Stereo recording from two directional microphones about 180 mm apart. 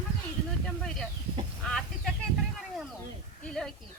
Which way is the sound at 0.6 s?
5° left (ahead or behind).